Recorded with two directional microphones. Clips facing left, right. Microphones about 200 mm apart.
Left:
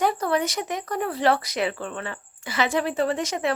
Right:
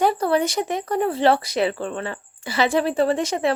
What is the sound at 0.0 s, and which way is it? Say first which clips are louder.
Speech: right 4 dB; 30° right (ahead or behind).